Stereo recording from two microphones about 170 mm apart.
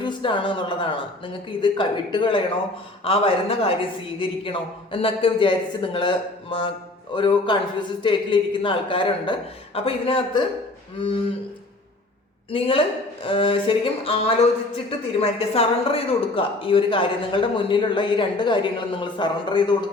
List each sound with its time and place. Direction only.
0.0 s speech: 30° left (ahead or behind)
12.5 s speech: 35° left (ahead or behind)